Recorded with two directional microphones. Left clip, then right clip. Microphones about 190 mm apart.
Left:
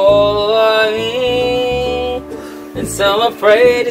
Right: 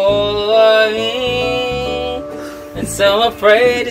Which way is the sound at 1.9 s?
15° left (ahead or behind).